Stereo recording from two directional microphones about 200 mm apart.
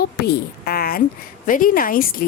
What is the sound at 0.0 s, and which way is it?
A woman's voice, 50° left (ahead or behind).